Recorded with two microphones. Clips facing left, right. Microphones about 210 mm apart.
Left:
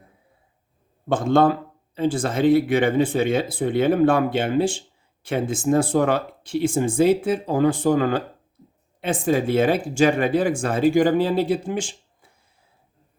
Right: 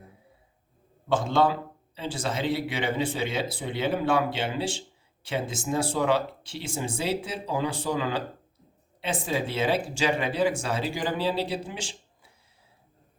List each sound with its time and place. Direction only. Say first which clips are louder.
1.0 s speech: left 6 dB; 50° left (ahead or behind)